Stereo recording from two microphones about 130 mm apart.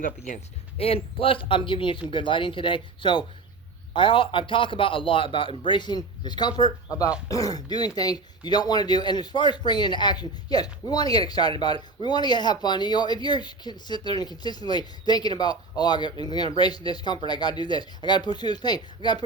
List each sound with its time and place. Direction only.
0.8 s speech: 50° left (ahead or behind); by 19.2 s 35° left (ahead or behind)